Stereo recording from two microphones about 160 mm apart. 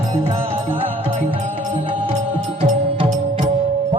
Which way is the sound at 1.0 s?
35° right (ahead or behind).